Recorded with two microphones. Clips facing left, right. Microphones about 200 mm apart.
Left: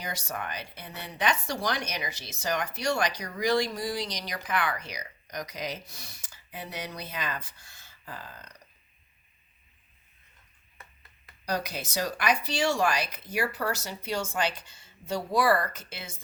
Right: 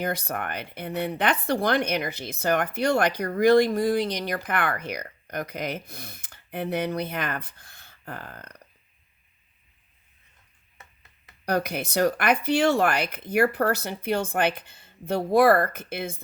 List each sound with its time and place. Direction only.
0.0 s speech: 55° right (ahead or behind)
11.4 s speech: 60° right (ahead or behind)